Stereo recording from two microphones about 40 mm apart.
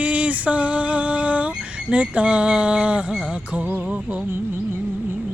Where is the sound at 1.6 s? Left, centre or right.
Right.